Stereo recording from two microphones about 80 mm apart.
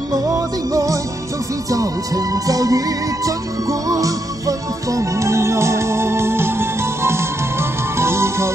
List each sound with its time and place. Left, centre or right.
0.1 s music: right